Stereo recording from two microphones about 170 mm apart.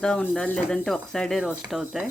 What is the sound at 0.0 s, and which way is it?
Speech, 5° left (ahead or behind).